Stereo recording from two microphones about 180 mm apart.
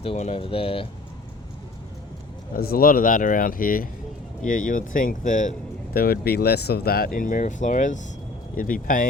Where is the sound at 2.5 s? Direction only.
55° left (ahead or behind).